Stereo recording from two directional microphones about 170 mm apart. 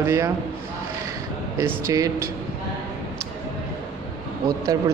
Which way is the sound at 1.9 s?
20° right (ahead or behind).